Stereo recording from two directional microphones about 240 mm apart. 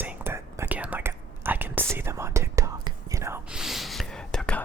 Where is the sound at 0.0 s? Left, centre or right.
Centre.